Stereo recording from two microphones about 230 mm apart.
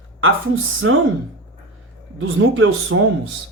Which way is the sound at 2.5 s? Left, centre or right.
Right.